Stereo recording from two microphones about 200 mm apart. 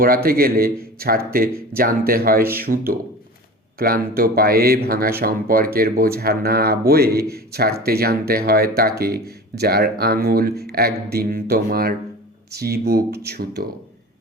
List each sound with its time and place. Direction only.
0.0 s a man's voice: 45° right (ahead or behind)